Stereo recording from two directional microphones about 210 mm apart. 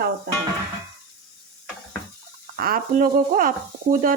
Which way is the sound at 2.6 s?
45° right (ahead or behind).